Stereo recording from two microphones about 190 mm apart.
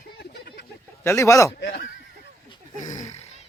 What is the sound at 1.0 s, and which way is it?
Speech, 15° left (ahead or behind).